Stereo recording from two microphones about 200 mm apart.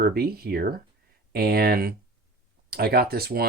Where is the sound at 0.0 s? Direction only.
50° right (ahead or behind).